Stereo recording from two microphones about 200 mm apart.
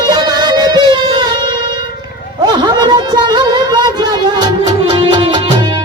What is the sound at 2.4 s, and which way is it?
Music, 20° right (ahead or behind).